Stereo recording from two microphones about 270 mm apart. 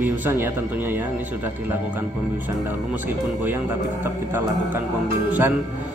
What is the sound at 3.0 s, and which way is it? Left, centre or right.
Speech, centre.